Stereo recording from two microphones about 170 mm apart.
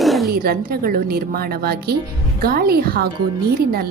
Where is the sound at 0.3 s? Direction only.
65° right (ahead or behind).